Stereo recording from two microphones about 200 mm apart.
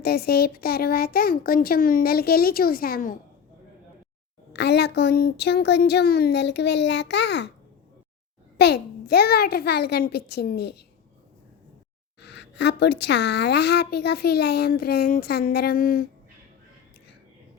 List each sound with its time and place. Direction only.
0.0 s a woman's voice: 50° left (ahead or behind)
4.5 s speech: 55° left (ahead or behind)
8.5 s a woman's voice: 55° left (ahead or behind)
12.2 s a woman's voice: 60° left (ahead or behind)